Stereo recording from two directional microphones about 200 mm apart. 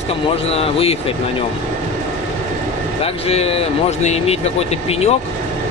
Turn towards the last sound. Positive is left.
turn(degrees=30)  # may be behind; listen again after turning